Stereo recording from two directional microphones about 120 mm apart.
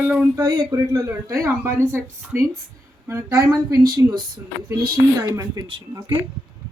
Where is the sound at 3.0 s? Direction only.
25° right (ahead or behind).